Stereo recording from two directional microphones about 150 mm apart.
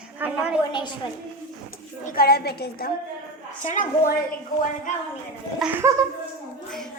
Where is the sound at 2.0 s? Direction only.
85° left.